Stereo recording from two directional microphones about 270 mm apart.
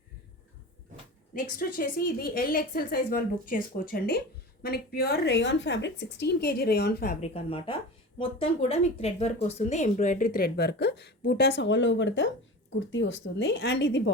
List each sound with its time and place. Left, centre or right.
1.3 s speech: left